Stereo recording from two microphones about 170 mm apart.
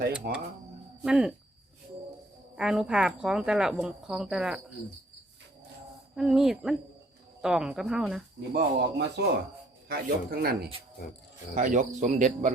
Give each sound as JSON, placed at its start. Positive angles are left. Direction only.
{"t": 0.1, "sound": "speech", "side_deg": -5}
{"t": 2.6, "sound": "speech", "side_deg": -5}
{"t": 6.1, "sound": "speech", "side_deg": 0}
{"t": 8.5, "sound": "speech", "side_deg": -75}
{"t": 9.9, "sound": "speech", "side_deg": -60}
{"t": 11.5, "sound": "speech", "side_deg": -50}